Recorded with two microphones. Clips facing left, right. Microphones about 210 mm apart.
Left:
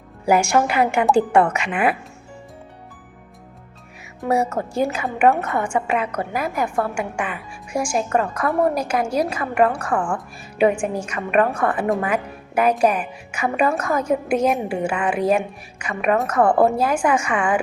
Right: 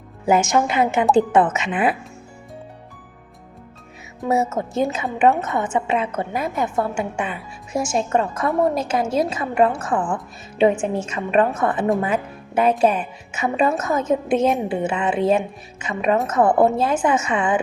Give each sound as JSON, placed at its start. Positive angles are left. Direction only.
{"t": 0.4, "sound": "a woman's voice", "side_deg": -20}
{"t": 4.3, "sound": "a woman's voice", "side_deg": -20}